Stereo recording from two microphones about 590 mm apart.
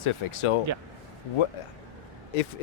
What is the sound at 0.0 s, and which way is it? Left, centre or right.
Speech, left.